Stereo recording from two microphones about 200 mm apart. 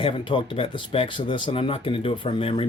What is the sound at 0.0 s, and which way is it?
Speech, 25° left (ahead or behind).